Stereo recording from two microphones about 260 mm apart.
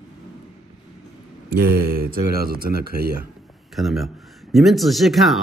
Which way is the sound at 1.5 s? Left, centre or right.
Right.